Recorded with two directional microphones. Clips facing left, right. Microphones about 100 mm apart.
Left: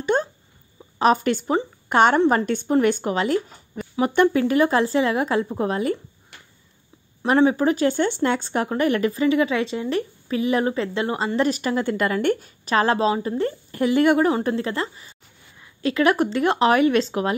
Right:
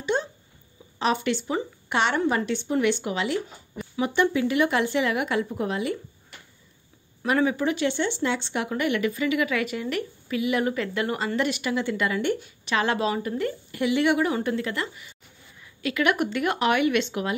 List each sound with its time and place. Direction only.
0.0 s a sound: 50° left (ahead or behind)
0.9 s speech: 45° left (ahead or behind)
7.2 s speech: 35° left (ahead or behind)